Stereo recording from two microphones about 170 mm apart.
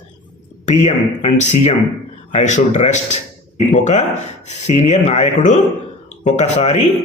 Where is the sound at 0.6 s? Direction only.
40° left (ahead or behind).